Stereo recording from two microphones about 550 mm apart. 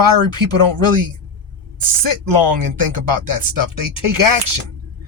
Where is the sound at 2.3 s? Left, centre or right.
Right.